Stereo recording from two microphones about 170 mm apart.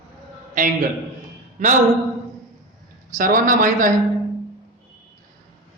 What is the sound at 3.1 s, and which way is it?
Speech, 50° right (ahead or behind).